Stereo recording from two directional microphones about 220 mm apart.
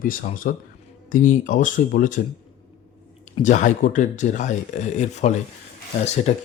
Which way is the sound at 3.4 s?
35° left (ahead or behind).